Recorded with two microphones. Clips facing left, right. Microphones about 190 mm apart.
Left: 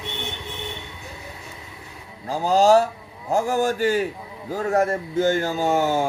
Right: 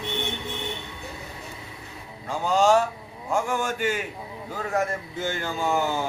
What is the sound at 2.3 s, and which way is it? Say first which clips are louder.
A man's voice: left 4 dB; 35° left (ahead or behind).